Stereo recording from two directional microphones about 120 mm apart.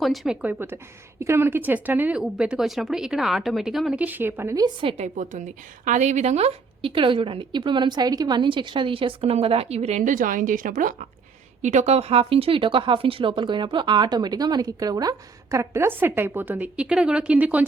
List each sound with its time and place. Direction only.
0.0 s a woman's voice: centre (ahead or behind)
0.4 s a woman's voice: 20° right (ahead or behind); by 4.0 s 5° right (ahead or behind)
4.0 s speech: 15° right (ahead or behind)
4.6 s a woman's voice: 45° right (ahead or behind)
4.9 s a woman's voice: 85° right
11.6 s speech: 75° right (ahead or behind); by 17.7 s 15° right (ahead or behind)